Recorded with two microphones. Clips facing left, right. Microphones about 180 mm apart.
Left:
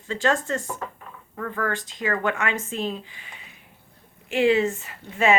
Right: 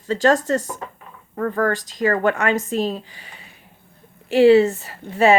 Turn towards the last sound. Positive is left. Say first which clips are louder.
# right 5 dB
turn(degrees=-35)  # may be behind; listen again after turning